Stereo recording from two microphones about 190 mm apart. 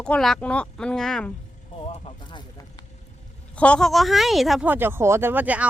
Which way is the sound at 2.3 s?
20° left (ahead or behind).